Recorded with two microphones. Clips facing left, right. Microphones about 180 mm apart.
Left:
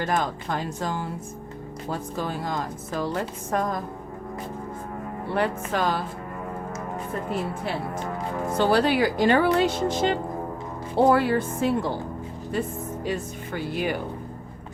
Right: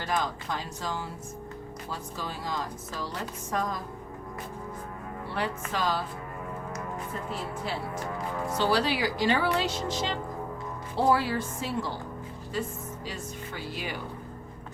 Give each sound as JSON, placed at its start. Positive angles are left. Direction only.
{"t": 0.0, "sound": "a woman's voice", "side_deg": 50}
{"t": 5.3, "sound": "a woman's voice", "side_deg": 55}
{"t": 7.1, "sound": "a woman's voice", "side_deg": 60}